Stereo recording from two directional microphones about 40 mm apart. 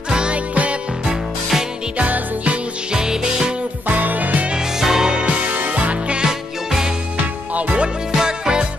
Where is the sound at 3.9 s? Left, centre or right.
Right.